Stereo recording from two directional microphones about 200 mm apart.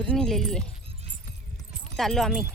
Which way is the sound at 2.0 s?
Centre (ahead or behind).